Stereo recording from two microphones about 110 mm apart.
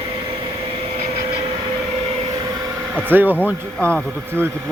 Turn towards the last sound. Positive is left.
turn(degrees=15)  # may be behind; listen again after turning